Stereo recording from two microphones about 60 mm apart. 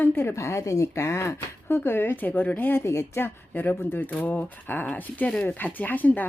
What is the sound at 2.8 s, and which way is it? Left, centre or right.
Speech, left.